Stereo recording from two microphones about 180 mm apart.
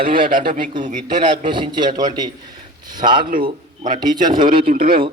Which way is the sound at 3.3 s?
50° right (ahead or behind).